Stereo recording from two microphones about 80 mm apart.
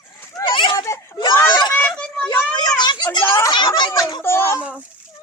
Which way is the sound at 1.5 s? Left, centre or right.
Left.